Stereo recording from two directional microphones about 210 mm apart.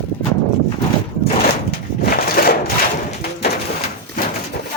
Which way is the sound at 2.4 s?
40° left (ahead or behind).